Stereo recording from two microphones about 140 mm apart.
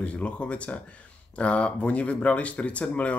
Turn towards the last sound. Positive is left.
turn(degrees=10)  # may be behind; listen again after turning